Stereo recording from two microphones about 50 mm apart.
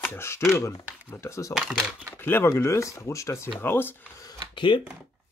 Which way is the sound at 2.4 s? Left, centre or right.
Left.